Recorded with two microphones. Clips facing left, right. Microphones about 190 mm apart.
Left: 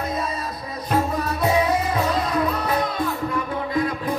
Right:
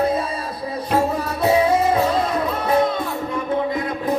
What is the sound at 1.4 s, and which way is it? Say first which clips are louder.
Music: right 5 dB; 30° right (ahead or behind).